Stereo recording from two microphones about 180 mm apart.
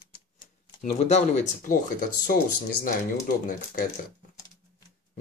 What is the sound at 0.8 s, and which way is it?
Speech, 40° left (ahead or behind).